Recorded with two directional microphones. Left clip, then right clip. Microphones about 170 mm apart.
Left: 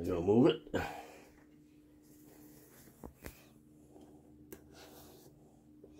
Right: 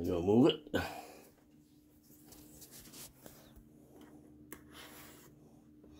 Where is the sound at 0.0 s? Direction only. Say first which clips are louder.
Even; 20° right (ahead or behind).